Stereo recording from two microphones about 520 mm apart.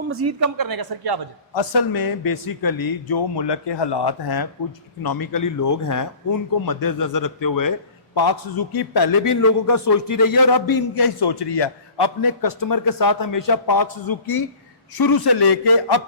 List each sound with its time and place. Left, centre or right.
0.1 s speech: right
1.5 s speech: left
9.4 s speech: left